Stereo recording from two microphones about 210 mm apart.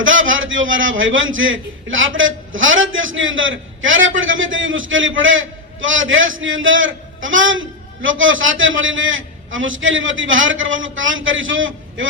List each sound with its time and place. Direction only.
0.0 s a man's voice: 65° right (ahead or behind)